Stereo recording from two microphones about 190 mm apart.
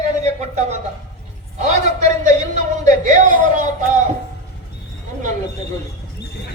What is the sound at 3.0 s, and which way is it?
Speech, 40° right (ahead or behind).